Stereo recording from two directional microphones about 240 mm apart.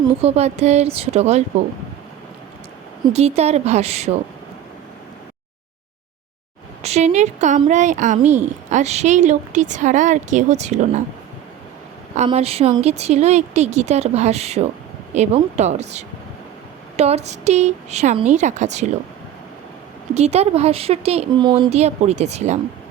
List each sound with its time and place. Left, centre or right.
0.2 s a woman's voice: right
3.0 s a woman's voice: right
6.8 s a woman's voice: right
12.1 s a woman's voice: right
20.1 s a woman's voice: right